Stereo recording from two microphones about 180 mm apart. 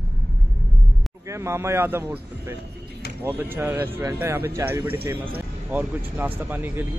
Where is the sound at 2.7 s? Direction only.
65° right (ahead or behind).